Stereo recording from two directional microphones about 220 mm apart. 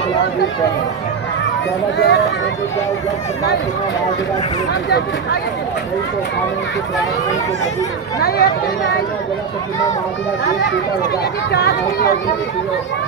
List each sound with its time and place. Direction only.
2.0 s speech: 55° left (ahead or behind)
4.8 s speech: 50° left (ahead or behind)
8.2 s speech: 45° left (ahead or behind)
11.5 s speech: 45° left (ahead or behind)